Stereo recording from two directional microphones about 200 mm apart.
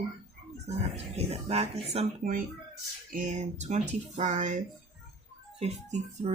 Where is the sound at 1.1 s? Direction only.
30° right (ahead or behind).